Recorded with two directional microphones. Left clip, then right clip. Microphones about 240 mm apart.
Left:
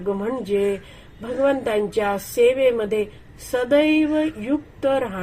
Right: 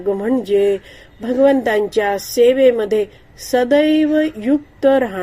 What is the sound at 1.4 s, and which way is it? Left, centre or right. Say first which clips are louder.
Speech: right 5 dB; right.